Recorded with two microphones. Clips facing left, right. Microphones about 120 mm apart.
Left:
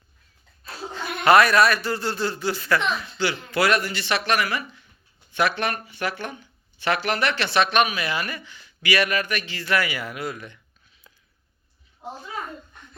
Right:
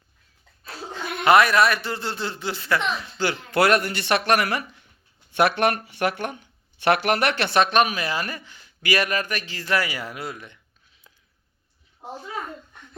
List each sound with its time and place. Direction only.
1.2 s a man's voice: 20° right (ahead or behind)
3.2 s speech: 50° right (ahead or behind); by 10.6 s 20° right (ahead or behind)